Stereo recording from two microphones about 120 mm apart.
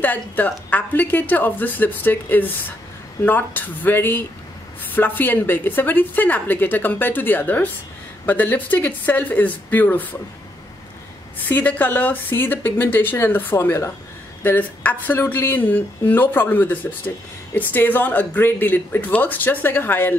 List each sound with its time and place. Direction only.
0.0 s a woman's voice: 15° left (ahead or behind)
11.4 s a woman's voice: 15° left (ahead or behind)